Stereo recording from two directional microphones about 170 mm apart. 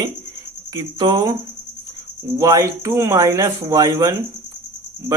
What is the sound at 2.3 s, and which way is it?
Speech, 20° right (ahead or behind).